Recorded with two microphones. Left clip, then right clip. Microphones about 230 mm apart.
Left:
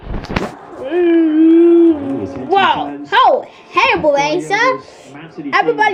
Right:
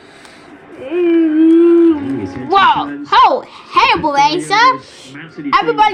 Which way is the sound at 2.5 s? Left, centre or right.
Right.